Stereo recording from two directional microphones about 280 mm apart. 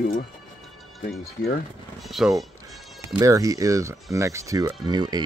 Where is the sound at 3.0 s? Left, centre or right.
Centre.